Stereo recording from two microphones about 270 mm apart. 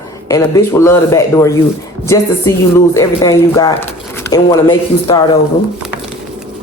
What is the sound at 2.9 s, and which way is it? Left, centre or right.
Speech, centre.